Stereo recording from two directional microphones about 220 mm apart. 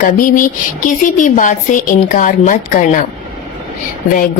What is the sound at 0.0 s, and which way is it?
Speech, 40° left (ahead or behind).